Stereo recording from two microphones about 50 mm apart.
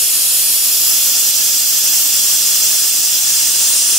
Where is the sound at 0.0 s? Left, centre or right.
Centre.